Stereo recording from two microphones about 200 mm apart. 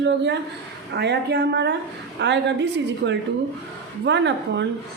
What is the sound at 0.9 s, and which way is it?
A woman's voice, 55° right (ahead or behind).